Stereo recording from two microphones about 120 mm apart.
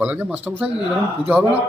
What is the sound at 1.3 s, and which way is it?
Speech, 15° right (ahead or behind).